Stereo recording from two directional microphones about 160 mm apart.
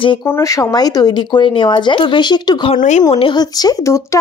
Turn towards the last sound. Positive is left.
turn(degrees=20)  # may be behind; listen again after turning